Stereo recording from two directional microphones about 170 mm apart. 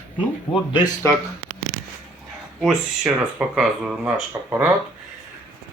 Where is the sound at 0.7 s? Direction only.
25° left (ahead or behind).